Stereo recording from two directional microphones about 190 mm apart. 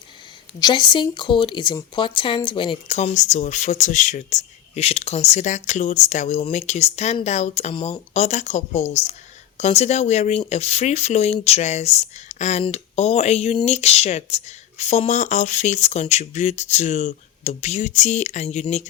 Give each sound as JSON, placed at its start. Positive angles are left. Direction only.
{"t": 0.6, "sound": "speech", "side_deg": 25}